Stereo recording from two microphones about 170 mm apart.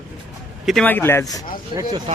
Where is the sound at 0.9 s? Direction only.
10° left (ahead or behind).